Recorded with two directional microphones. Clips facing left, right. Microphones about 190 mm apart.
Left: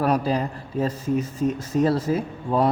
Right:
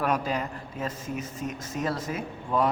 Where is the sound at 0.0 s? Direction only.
35° left (ahead or behind).